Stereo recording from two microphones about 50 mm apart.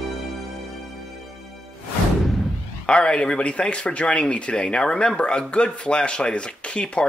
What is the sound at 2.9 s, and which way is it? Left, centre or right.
Speech, centre.